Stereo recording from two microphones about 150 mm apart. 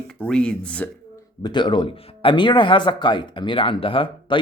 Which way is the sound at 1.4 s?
30° left (ahead or behind).